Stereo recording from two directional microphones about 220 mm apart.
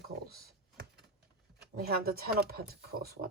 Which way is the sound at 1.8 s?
45° right (ahead or behind).